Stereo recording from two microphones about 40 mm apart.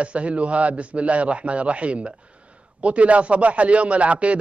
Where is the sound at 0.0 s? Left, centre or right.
Right.